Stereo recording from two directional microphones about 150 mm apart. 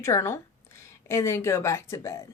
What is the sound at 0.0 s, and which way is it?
A woman's voice, 20° left (ahead or behind).